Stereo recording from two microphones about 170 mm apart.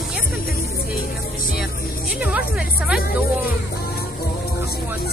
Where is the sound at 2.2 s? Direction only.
5° right (ahead or behind).